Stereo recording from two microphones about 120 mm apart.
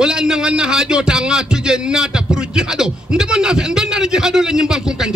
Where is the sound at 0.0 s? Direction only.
5° right (ahead or behind).